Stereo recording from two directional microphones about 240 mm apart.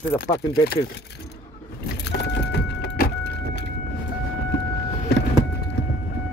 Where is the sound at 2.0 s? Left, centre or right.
Left.